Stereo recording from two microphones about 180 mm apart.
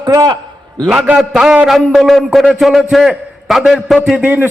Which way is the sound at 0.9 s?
5° right (ahead or behind).